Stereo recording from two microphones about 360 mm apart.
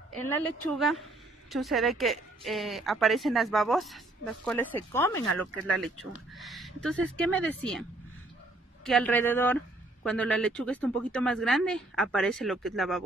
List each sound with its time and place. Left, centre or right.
0.1 s a woman's voice: centre
8.8 s a woman's voice: centre